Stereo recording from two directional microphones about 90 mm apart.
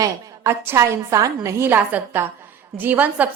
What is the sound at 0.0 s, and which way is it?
A woman's voice, 30° right (ahead or behind).